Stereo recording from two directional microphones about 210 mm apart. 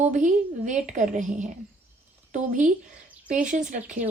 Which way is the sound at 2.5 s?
40° right (ahead or behind).